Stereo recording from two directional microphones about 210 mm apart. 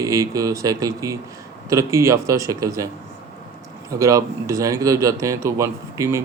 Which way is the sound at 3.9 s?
15° right (ahead or behind).